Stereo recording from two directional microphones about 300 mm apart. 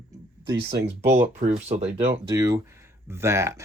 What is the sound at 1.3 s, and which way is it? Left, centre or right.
Speech, right.